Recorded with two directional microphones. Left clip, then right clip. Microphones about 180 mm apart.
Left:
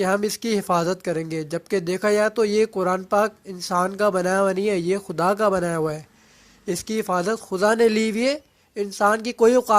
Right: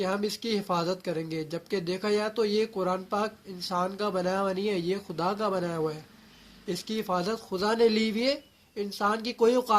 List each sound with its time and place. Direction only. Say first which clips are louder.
0.0 s speech: left 8 dB; 55° left (ahead or behind)